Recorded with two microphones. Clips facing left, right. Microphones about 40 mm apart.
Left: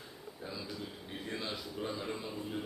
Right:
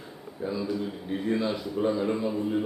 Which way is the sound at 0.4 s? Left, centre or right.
Centre.